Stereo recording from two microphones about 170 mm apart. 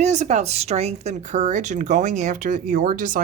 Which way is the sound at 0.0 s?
45° right (ahead or behind).